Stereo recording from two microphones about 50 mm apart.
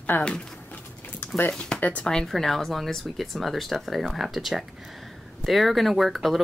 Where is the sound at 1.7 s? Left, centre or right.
Left.